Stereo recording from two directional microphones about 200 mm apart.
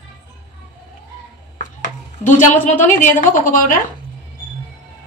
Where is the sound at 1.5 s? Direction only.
40° left (ahead or behind).